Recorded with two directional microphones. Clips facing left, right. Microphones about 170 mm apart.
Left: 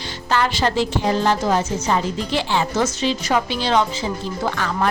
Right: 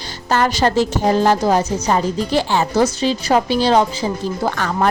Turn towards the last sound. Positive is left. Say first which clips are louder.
# right 3 dB
turn(degrees=-40)  # may be behind; listen again after turning